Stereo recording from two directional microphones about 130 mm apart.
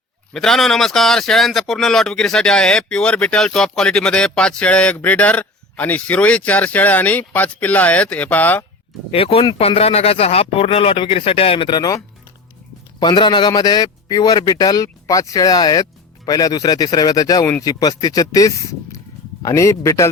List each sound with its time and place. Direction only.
0.3 s speech: 5° left (ahead or behind)
9.1 s speech: 45° left (ahead or behind)
13.0 s a man's voice: 35° left (ahead or behind)